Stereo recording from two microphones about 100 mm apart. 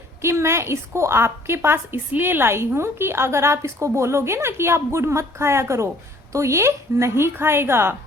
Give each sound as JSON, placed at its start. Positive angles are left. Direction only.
{"t": 0.2, "sound": "a woman's voice", "side_deg": -25}